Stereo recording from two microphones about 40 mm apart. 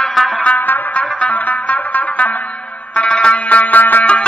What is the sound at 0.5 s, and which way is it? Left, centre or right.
Music, left.